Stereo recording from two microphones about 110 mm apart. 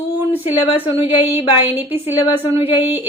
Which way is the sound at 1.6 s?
20° right (ahead or behind).